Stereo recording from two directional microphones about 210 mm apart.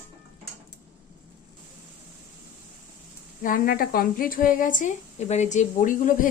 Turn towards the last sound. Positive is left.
turn(degrees=40)  # may be behind; listen again after turning